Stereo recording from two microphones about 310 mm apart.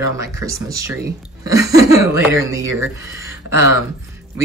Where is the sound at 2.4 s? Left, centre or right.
Centre.